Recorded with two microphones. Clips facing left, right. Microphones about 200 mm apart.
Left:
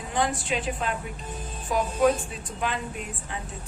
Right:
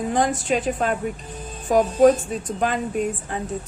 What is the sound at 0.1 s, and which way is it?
Speech, 45° right (ahead or behind).